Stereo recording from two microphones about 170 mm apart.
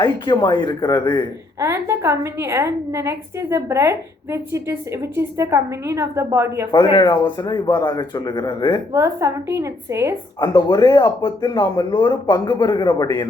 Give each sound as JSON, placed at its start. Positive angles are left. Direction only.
{"t": 0.0, "sound": "speech", "side_deg": 25}
{"t": 1.5, "sound": "a woman's voice", "side_deg": -15}
{"t": 6.9, "sound": "speech", "side_deg": 25}
{"t": 8.9, "sound": "a woman's voice", "side_deg": -15}
{"t": 10.4, "sound": "speech", "side_deg": 25}